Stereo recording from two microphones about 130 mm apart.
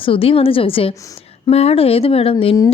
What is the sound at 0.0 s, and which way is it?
Speech, 45° left (ahead or behind).